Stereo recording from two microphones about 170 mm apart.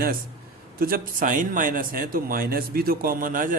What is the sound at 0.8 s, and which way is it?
Speech, 60° right (ahead or behind).